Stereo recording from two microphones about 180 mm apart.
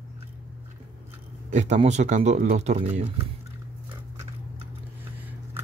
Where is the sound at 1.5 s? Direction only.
40° right (ahead or behind).